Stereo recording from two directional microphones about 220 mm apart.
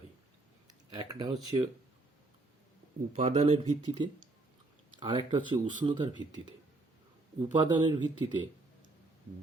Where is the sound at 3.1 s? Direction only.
30° right (ahead or behind).